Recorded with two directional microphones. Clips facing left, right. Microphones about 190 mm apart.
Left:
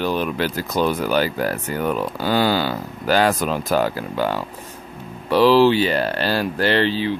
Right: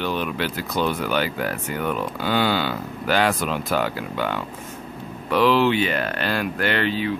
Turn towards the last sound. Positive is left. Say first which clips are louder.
# left 4 dB
turn(degrees=30)  # may be behind; listen again after turning